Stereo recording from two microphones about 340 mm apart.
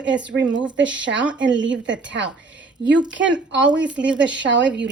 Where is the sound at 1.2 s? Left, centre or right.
Centre.